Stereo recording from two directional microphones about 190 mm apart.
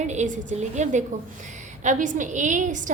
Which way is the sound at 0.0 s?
40° right (ahead or behind).